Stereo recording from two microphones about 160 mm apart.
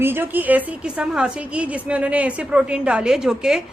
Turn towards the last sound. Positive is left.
turn(degrees=-5)  # may be behind; listen again after turning